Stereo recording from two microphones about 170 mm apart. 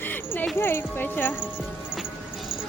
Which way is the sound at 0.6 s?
15° left (ahead or behind).